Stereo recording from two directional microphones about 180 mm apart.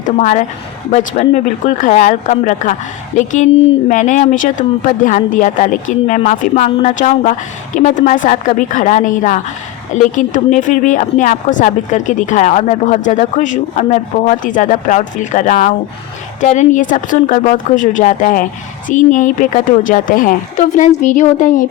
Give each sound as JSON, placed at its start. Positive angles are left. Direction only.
{"t": 0.0, "sound": "a woman's voice", "side_deg": 40}